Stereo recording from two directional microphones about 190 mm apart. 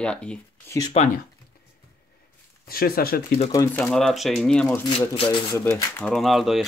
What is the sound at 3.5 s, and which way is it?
Speech, 15° left (ahead or behind).